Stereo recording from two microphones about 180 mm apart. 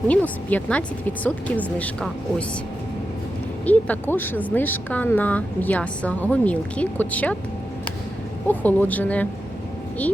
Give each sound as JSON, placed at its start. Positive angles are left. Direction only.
{"t": 0.1, "sound": "speech", "side_deg": 10}
{"t": 3.7, "sound": "speech", "side_deg": 10}
{"t": 8.4, "sound": "speech", "side_deg": 10}